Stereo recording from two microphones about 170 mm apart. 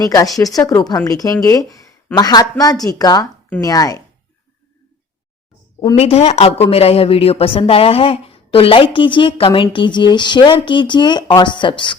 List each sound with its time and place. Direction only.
0.0 s speech: 20° left (ahead or behind)
6.0 s speech: 35° left (ahead or behind)